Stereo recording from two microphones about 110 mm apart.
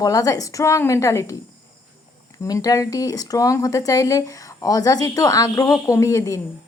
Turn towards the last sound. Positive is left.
turn(degrees=30)  # may be behind; listen again after turning